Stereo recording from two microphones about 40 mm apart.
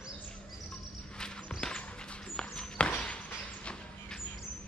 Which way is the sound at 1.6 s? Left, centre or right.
Left.